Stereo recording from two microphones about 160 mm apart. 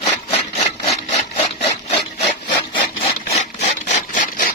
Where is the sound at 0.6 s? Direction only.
40° left (ahead or behind).